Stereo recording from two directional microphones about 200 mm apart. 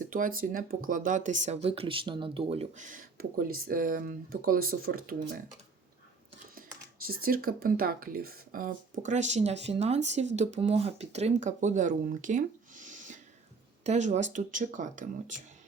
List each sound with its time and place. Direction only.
0.0 s speech: 45° right (ahead or behind)
6.6 s speech: 45° right (ahead or behind)